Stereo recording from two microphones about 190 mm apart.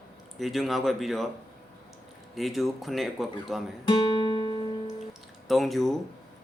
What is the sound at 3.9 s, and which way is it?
Guitar, 25° left (ahead or behind).